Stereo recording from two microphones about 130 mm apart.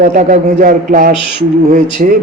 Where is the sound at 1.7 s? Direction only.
90° right.